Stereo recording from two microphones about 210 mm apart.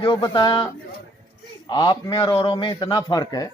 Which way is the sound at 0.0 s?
20° left (ahead or behind).